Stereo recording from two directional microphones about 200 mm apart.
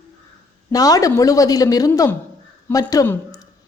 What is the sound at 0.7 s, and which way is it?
A woman's voice, 15° left (ahead or behind).